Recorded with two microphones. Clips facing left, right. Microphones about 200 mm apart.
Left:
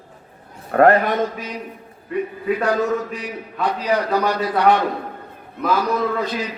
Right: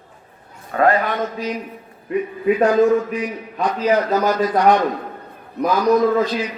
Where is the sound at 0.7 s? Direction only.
60° left (ahead or behind).